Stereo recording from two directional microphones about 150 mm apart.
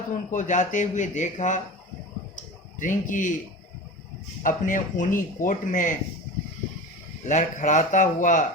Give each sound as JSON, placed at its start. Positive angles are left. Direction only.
{"t": 0.1, "sound": "speech", "side_deg": 55}
{"t": 2.3, "sound": "a sound", "side_deg": 60}
{"t": 4.4, "sound": "speech", "side_deg": 60}
{"t": 7.3, "sound": "speech", "side_deg": 55}